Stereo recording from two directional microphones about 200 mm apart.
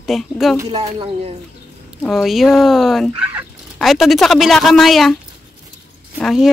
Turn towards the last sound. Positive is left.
turn(degrees=0)  # may be behind; listen again after turning